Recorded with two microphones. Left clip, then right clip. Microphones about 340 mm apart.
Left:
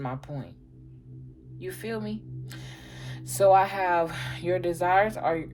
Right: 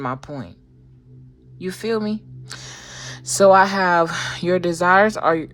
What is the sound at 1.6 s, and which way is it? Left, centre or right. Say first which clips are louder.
Speech: right 11 dB; right.